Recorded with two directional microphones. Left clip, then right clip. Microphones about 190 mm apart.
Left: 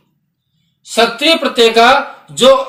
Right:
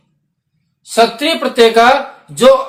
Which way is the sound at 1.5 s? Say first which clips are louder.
Right 2 dB; 25° right (ahead or behind).